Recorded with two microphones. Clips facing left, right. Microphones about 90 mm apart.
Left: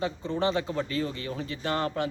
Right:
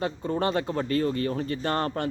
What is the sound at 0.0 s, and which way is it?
Speech, 50° right (ahead or behind).